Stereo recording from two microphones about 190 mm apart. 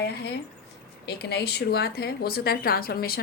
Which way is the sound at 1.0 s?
60° left (ahead or behind).